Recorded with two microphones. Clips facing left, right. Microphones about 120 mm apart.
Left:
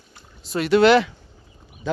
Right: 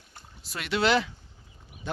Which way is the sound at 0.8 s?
70° left (ahead or behind).